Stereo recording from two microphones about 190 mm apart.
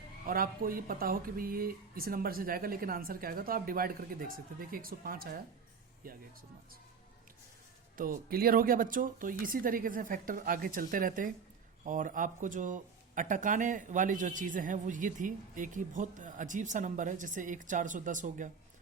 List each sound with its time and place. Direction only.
0.3 s speech: 50° right (ahead or behind)
7.9 s speech: 45° right (ahead or behind)